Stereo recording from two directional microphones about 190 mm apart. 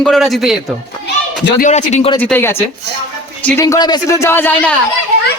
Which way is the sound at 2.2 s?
10° left (ahead or behind).